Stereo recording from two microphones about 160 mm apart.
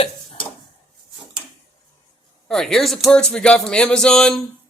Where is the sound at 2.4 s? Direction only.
5° left (ahead or behind).